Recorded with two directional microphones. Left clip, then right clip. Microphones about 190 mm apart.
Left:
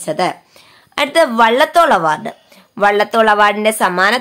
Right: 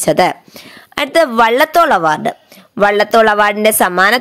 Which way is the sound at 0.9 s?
30° right (ahead or behind).